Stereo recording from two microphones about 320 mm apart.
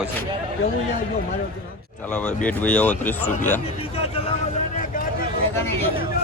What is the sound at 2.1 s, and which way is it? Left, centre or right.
Speech, centre.